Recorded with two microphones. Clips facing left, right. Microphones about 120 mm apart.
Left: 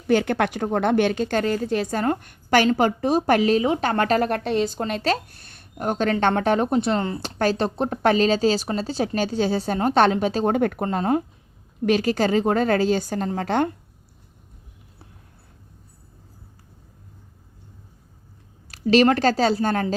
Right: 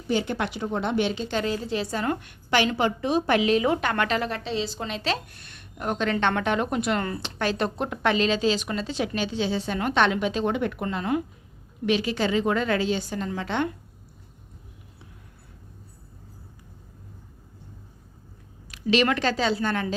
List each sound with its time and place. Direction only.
0.1 s a woman's voice: 60° left (ahead or behind); by 3.6 s 40° left (ahead or behind)
3.6 s speech: 30° left (ahead or behind)
7.2 s speech: 40° left (ahead or behind)
18.7 s speech: 40° left (ahead or behind)